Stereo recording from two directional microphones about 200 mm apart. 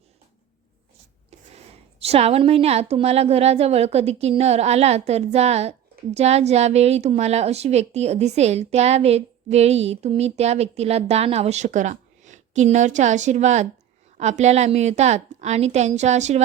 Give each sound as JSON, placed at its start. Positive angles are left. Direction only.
{"t": 2.0, "sound": "a woman's voice", "side_deg": -30}